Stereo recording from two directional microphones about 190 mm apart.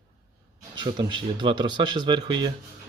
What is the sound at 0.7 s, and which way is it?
Speech, 25° right (ahead or behind).